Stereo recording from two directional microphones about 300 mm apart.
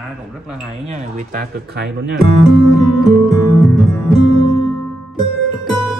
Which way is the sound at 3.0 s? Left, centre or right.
Centre.